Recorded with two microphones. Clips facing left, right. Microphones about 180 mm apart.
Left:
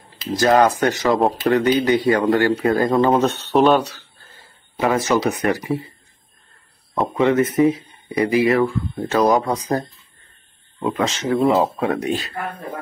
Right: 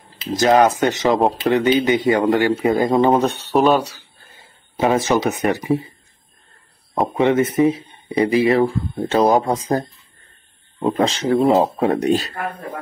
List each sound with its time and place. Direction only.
0.2 s speech: 20° right (ahead or behind)
7.0 s speech: 20° right (ahead or behind)
10.9 s speech: 35° right (ahead or behind)